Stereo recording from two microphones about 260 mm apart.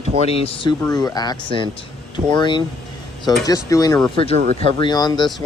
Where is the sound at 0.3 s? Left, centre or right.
Left.